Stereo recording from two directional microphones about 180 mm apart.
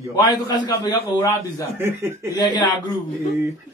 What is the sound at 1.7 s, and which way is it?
Speech, 15° right (ahead or behind).